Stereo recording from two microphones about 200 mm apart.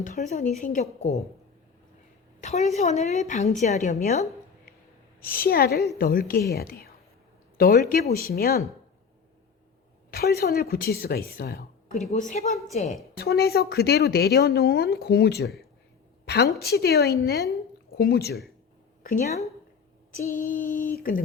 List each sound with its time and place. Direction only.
0.0 s a woman's voice: 40° left (ahead or behind)
2.4 s a woman's voice: 35° left (ahead or behind)
4.0 s a sound: 40° left (ahead or behind)
5.2 s a woman's voice: 50° left (ahead or behind)
10.1 s a woman's voice: 50° left (ahead or behind)
12.1 s a woman's voice: 40° left (ahead or behind)
13.1 s a woman's voice: 50° left (ahead or behind)
19.0 s a woman's voice: 40° left (ahead or behind)